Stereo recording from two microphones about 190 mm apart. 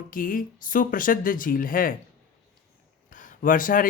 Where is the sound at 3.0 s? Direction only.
45° left (ahead or behind).